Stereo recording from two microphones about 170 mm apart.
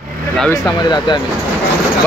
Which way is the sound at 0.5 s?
20° left (ahead or behind).